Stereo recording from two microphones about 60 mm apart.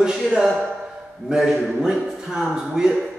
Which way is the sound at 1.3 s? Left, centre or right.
Centre.